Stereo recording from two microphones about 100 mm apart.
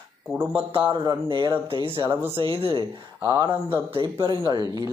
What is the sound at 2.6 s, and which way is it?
Speech, 65° right (ahead or behind).